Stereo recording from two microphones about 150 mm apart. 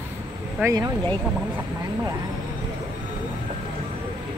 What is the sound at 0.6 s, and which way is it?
Speech, 20° right (ahead or behind).